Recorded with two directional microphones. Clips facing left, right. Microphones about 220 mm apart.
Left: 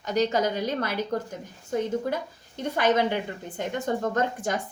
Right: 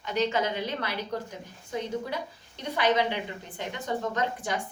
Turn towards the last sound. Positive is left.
turn(degrees=45)  # may be behind; listen again after turning